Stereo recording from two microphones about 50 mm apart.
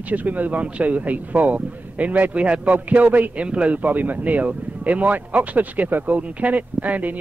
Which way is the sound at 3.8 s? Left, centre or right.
Right.